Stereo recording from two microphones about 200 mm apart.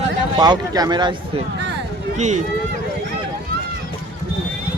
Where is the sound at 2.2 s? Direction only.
35° right (ahead or behind).